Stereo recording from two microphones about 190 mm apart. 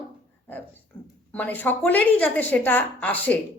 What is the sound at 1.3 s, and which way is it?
A woman's voice, 10° left (ahead or behind).